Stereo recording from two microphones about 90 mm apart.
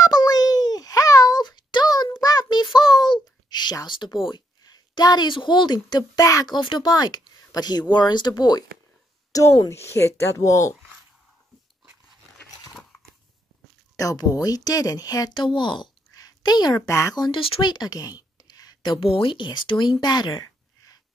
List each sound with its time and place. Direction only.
0.0 s a sound: 45° left (ahead or behind)
5.3 s speech: 60° left (ahead or behind)
9.3 s a woman's voice: 35° left (ahead or behind)
13.9 s speech: 40° left (ahead or behind); by 15.9 s 65° left (ahead or behind)
16.1 s a sound: 45° left (ahead or behind)
16.8 s a woman's voice: 35° left (ahead or behind)
17.1 s speech: 55° left (ahead or behind)
17.6 s a sound: 55° left (ahead or behind)
18.8 s speech: 80° left; by 20.4 s 55° left (ahead or behind)